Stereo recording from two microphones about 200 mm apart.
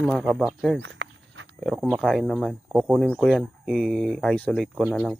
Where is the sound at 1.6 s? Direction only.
Centre (ahead or behind).